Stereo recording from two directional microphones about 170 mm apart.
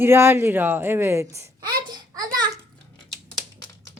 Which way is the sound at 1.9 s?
20° right (ahead or behind).